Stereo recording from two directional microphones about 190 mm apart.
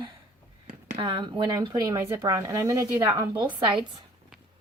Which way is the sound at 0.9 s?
25° right (ahead or behind).